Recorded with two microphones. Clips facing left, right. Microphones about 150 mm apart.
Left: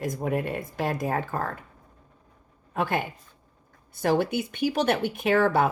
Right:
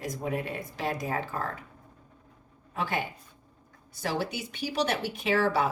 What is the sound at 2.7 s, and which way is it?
A woman's voice, 55° left (ahead or behind).